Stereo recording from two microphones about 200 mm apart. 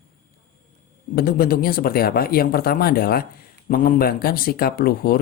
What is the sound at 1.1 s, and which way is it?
Speech, 50° left (ahead or behind).